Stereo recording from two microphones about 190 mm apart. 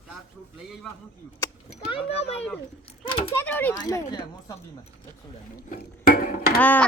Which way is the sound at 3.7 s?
20° left (ahead or behind).